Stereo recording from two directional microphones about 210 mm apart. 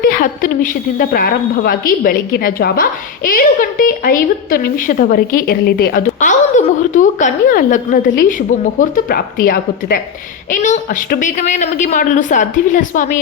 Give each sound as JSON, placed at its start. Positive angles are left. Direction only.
{"t": 0.0, "sound": "a woman's voice", "side_deg": 40}